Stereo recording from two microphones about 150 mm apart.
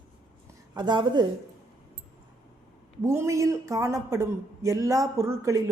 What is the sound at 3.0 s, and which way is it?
Speech, 20° right (ahead or behind).